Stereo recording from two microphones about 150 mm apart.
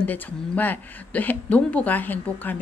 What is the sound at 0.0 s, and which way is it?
Speech, 10° left (ahead or behind).